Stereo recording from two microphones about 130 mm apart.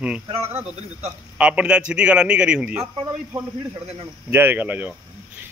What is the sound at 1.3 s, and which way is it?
Speech, 10° right (ahead or behind).